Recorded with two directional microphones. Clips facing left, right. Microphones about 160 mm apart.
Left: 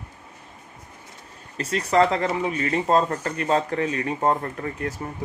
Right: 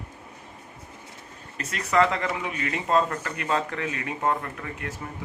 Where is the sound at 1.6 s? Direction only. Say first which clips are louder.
Left 3 dB; 30° left (ahead or behind).